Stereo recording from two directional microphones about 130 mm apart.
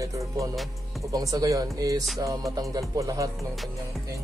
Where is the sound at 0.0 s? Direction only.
25° right (ahead or behind).